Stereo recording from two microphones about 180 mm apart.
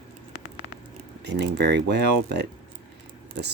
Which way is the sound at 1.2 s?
70° right (ahead or behind).